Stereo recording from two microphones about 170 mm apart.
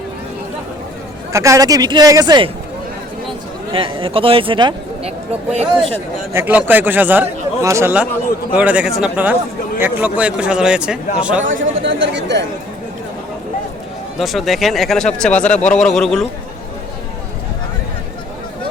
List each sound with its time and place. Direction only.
1.3 s speech: 20° right (ahead or behind)
3.7 s speech: 30° right (ahead or behind)
6.3 s speech: 10° right (ahead or behind)
11.4 s speech: 90° right
14.2 s speech: centre (ahead or behind)